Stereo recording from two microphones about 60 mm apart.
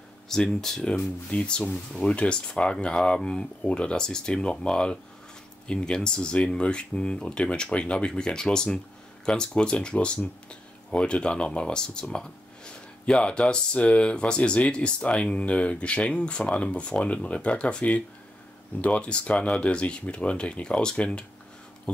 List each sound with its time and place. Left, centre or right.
0.3 s speech: centre